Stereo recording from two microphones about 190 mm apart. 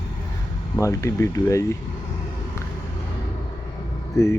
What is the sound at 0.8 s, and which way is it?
Speech, 15° left (ahead or behind).